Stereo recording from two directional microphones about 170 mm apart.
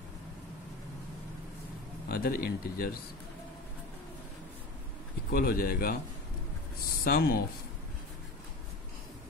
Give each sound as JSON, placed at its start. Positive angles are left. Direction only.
{"t": 2.0, "sound": "speech", "side_deg": 60}
{"t": 5.3, "sound": "speech", "side_deg": 60}
{"t": 7.1, "sound": "speech", "side_deg": 60}